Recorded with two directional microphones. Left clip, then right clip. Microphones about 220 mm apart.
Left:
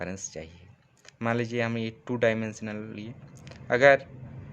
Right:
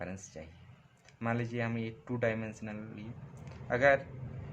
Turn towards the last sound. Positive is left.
turn(degrees=40)  # may be behind; listen again after turning